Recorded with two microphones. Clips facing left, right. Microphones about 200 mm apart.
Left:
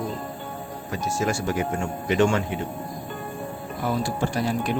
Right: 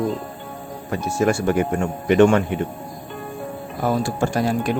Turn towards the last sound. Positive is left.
turn(degrees=-45)  # may be behind; listen again after turning